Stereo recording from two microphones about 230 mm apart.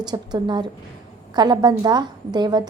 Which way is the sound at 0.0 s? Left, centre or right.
Centre.